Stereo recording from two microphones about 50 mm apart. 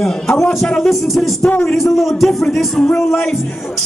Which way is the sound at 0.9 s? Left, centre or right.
Centre.